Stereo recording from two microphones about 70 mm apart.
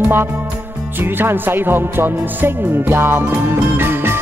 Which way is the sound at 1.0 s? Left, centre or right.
Right.